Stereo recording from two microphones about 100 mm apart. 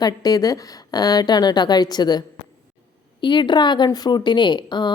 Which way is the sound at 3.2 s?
50° left (ahead or behind).